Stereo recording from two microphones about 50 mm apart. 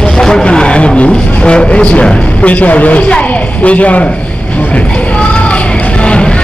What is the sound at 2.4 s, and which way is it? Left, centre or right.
A man's voice, left.